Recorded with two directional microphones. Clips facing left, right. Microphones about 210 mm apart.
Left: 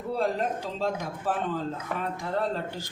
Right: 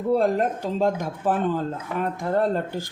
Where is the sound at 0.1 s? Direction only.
50° right (ahead or behind).